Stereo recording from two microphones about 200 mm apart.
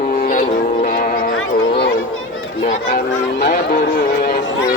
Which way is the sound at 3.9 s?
50° left (ahead or behind).